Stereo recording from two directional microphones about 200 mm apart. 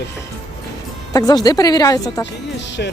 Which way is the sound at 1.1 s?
20° left (ahead or behind).